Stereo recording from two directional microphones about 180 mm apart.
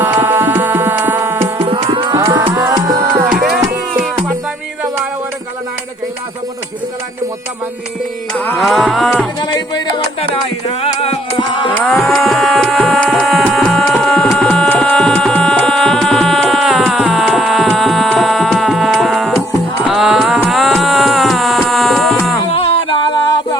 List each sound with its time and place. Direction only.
0.0 s music: 10° right (ahead or behind)
1.5 s music: 30° right (ahead or behind)
3.5 s music: centre (ahead or behind)
8.3 s music: centre (ahead or behind)
9.4 s music: 25° left (ahead or behind)
11.7 s a sound: 5° left (ahead or behind)
13.0 s music: 5° left (ahead or behind)
13.5 s tabla: centre (ahead or behind)
19.9 s music: centre (ahead or behind)
22.5 s music: 30° left (ahead or behind)